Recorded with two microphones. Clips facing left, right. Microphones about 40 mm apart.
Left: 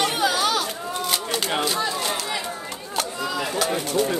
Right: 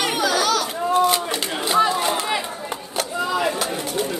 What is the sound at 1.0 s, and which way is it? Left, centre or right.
Shuffling cards, centre.